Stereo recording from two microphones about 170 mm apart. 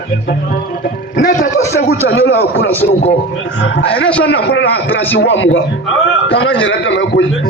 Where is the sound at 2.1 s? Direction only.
90° left.